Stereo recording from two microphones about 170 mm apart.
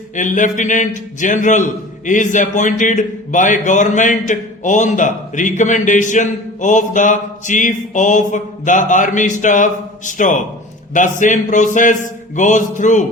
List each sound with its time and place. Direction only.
0.2 s speech: 50° left (ahead or behind)